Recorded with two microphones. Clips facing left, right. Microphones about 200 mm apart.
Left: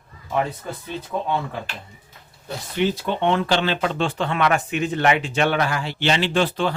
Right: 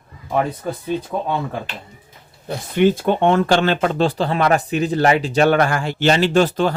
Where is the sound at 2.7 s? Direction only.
50° right (ahead or behind).